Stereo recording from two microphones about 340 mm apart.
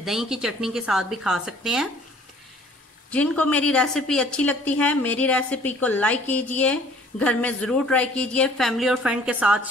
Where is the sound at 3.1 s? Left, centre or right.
Centre.